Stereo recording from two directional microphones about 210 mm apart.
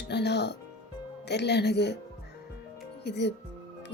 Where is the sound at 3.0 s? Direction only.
55° left (ahead or behind).